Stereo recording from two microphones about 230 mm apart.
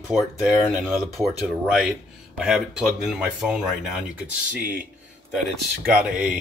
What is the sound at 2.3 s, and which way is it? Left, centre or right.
Speech, centre.